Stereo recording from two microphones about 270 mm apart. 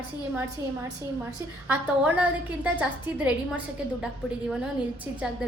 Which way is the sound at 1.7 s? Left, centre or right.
Centre.